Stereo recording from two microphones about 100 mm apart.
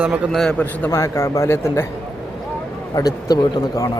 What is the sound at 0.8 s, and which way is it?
Speech, 30° left (ahead or behind).